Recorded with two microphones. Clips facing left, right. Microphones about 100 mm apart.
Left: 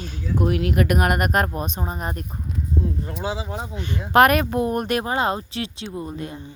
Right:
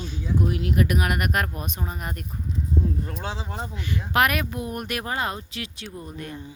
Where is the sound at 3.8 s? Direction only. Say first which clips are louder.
Left 7 dB; 30° left (ahead or behind).